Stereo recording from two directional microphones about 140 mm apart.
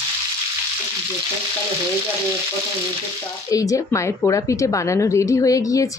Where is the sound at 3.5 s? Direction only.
20° left (ahead or behind).